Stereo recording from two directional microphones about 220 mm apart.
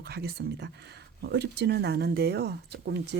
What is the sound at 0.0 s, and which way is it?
Speech, 45° right (ahead or behind).